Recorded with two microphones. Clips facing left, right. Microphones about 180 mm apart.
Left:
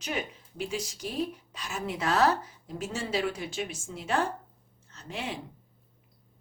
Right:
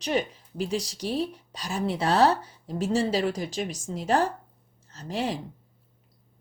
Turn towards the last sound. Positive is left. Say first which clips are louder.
# right 7 dB
turn(degrees=-40)  # may be behind; listen again after turning